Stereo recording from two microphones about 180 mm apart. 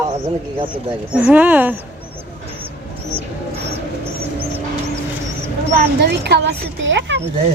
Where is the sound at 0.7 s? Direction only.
10° right (ahead or behind).